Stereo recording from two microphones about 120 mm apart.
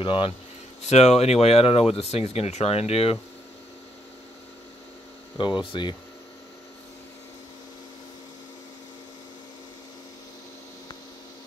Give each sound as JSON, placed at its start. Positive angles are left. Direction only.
{"t": 0.0, "sound": "speech", "side_deg": 50}
{"t": 0.8, "sound": "speech", "side_deg": 65}
{"t": 5.4, "sound": "speech", "side_deg": 45}